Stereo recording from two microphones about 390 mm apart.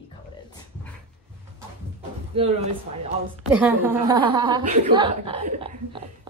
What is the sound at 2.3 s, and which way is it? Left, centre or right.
Speech, centre.